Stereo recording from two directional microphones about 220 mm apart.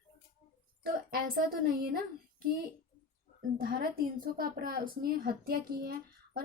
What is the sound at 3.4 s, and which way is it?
A woman's voice, 40° right (ahead or behind).